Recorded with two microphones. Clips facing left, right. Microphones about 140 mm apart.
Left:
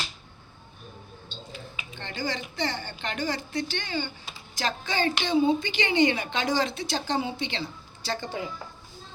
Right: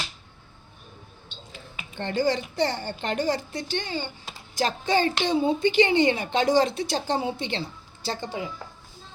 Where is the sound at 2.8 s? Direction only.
45° right (ahead or behind).